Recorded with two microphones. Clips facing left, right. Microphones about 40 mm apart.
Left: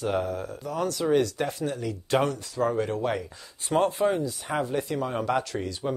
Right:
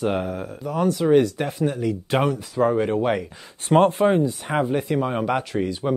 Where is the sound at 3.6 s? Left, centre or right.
Right.